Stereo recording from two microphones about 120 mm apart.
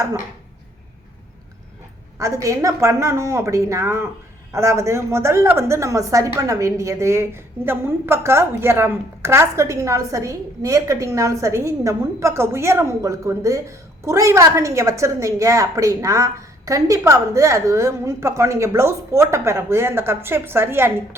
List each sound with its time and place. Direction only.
2.1 s a woman's voice: 25° right (ahead or behind)